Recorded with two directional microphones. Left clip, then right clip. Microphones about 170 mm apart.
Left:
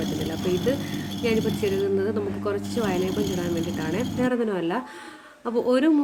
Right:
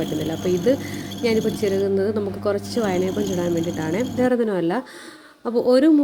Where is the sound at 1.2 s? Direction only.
35° right (ahead or behind).